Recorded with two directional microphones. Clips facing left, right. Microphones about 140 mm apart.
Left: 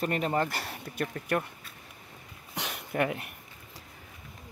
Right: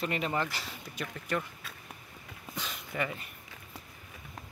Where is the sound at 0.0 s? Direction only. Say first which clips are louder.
Left 4 dB; 45° left (ahead or behind).